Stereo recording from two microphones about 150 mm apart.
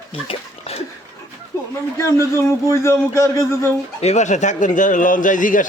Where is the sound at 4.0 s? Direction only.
50° left (ahead or behind).